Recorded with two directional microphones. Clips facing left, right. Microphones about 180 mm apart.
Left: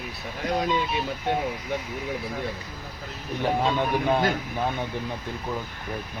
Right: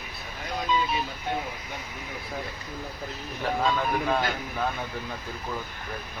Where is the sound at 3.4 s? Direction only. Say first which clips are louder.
Left 2 dB; 25° left (ahead or behind).